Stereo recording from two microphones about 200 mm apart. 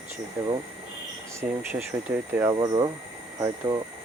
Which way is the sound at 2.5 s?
20° right (ahead or behind).